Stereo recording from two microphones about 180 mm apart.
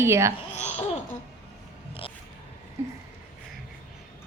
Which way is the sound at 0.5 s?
35° left (ahead or behind).